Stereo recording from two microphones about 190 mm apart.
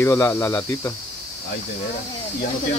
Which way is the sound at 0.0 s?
15° left (ahead or behind).